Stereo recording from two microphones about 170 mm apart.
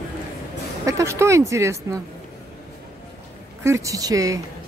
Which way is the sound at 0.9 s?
15° right (ahead or behind).